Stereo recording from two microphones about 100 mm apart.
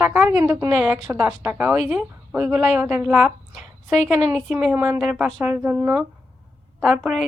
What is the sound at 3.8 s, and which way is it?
Speech, centre (ahead or behind).